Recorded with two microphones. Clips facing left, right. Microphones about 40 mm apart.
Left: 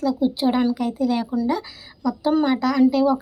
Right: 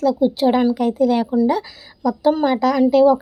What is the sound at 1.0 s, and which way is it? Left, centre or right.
Speech, right.